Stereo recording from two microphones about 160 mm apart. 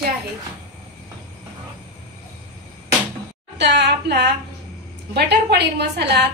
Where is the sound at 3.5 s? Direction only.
90° right.